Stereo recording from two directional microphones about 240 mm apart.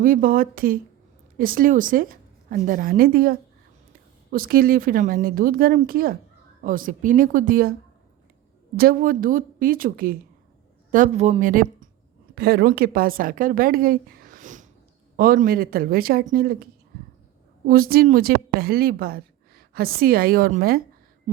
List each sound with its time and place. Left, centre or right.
0.0 s a woman's voice: right
8.7 s a woman's voice: right
17.7 s a woman's voice: right